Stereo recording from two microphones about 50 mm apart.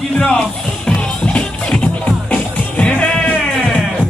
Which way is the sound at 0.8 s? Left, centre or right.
Left.